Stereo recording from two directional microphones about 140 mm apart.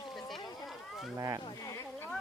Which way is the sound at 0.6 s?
Centre (ahead or behind).